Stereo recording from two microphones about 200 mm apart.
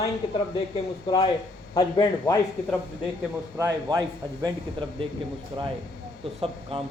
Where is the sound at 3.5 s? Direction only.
15° right (ahead or behind).